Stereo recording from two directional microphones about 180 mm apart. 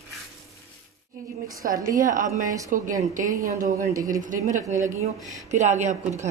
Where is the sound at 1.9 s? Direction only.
45° right (ahead or behind).